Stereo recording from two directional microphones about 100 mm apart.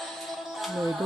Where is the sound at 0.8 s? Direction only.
Centre (ahead or behind).